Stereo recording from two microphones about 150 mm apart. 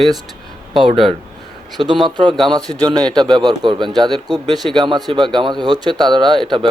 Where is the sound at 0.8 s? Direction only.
35° right (ahead or behind).